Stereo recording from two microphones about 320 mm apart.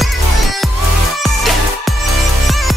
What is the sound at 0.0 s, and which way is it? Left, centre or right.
Music, centre.